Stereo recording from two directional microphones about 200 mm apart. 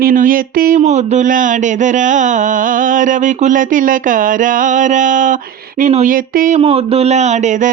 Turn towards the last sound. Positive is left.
turn(degrees=-35)  # may be behind; listen again after turning